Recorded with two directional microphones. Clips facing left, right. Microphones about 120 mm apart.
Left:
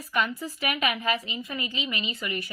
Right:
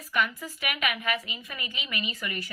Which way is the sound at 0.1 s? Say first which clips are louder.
Left 1 dB; 25° left (ahead or behind).